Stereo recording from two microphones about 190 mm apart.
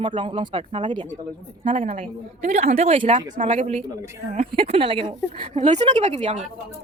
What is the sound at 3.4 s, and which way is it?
A woman's voice, 40° right (ahead or behind).